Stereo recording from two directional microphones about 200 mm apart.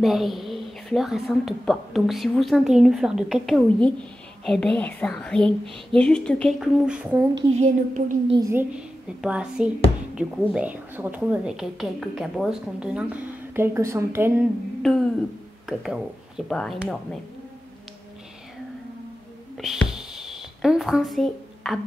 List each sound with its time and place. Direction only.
0.0 s a woman's voice: centre (ahead or behind)
7.5 s a woman's voice: 35° right (ahead or behind)
8.4 s a woman's voice: 10° right (ahead or behind)
14.8 s a sound: centre (ahead or behind)
15.6 s speech: centre (ahead or behind)
19.5 s a sound: centre (ahead or behind)